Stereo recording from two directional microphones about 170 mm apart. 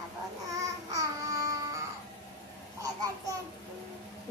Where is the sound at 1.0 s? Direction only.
15° right (ahead or behind).